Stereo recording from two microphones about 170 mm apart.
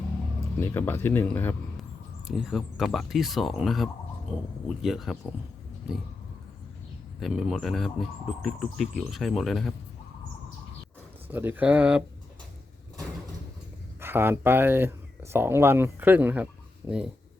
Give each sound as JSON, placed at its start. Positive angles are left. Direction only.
{"t": 0.6, "sound": "speech", "side_deg": 15}
{"t": 2.2, "sound": "speech", "side_deg": 0}
{"t": 7.2, "sound": "speech", "side_deg": 0}
{"t": 11.3, "sound": "speech", "side_deg": -10}
{"t": 14.0, "sound": "speech", "side_deg": -15}